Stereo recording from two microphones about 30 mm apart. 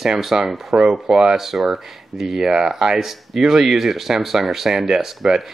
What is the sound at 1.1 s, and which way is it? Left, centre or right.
Speech, centre.